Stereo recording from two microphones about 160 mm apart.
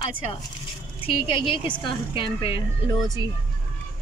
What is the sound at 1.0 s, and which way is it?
A woman's voice, 35° left (ahead or behind).